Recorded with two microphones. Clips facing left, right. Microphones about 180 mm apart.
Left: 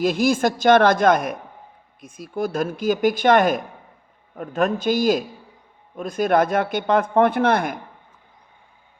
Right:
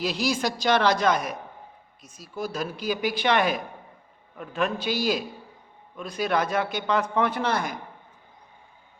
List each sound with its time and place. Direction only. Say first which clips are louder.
0.0 s speech: left 7 dB; 50° left (ahead or behind)